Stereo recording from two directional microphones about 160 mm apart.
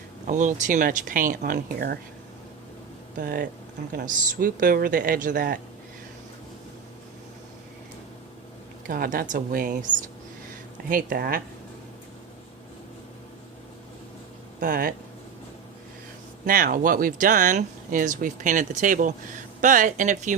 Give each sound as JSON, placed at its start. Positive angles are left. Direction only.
{"t": 0.3, "sound": "speech", "side_deg": -50}
{"t": 3.2, "sound": "speech", "side_deg": -65}
{"t": 3.9, "sound": "speech", "side_deg": -55}
{"t": 8.9, "sound": "speech", "side_deg": -60}
{"t": 14.6, "sound": "speech", "side_deg": -65}
{"t": 16.5, "sound": "speech", "side_deg": -65}